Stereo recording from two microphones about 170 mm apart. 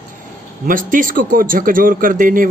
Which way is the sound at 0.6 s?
50° right (ahead or behind).